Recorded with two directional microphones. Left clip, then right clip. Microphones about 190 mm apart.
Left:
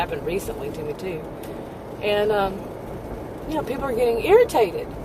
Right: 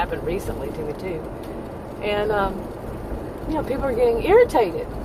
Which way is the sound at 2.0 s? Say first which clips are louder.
Left 1 dB; 25° left (ahead or behind).